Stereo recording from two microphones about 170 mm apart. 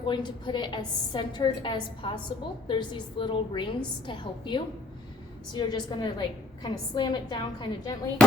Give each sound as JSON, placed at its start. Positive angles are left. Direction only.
{"t": 0.0, "sound": "a woman's voice", "side_deg": 30}